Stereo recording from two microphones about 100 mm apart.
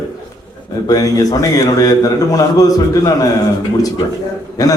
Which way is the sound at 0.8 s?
35° left (ahead or behind).